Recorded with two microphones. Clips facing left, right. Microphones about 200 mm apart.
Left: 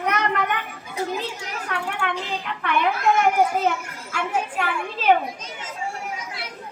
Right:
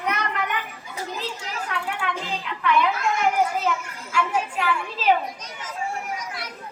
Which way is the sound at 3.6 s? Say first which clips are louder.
Left 2 dB; 60° left (ahead or behind).